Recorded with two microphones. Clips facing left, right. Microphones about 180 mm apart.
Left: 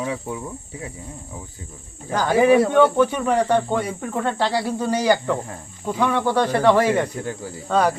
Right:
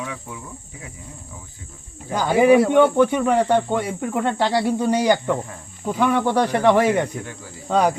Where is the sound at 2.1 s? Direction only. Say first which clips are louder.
Right 1 dB; 10° right (ahead or behind).